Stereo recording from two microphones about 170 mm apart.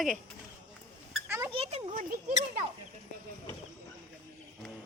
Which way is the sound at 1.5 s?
35° right (ahead or behind).